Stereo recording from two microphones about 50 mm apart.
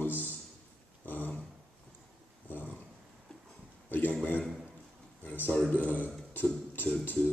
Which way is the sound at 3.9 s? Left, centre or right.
Left.